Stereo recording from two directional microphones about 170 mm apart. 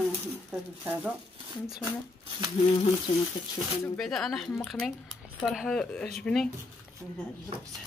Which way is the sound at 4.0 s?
Centre (ahead or behind).